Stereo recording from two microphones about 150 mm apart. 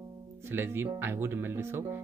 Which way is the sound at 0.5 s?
15° right (ahead or behind).